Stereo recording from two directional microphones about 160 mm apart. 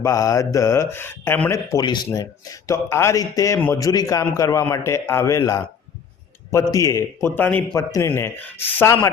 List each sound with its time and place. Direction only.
0.0 s a man's voice: 20° left (ahead or behind)